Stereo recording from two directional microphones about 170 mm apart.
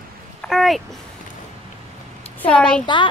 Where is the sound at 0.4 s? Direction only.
Centre (ahead or behind).